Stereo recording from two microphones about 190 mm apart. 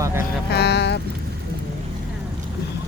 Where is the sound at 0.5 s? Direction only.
60° left (ahead or behind).